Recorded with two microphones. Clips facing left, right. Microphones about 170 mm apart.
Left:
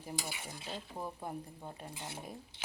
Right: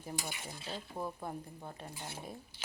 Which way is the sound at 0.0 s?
10° left (ahead or behind).